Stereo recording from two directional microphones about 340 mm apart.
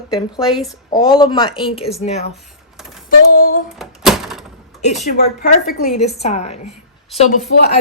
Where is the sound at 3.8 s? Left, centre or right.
Centre.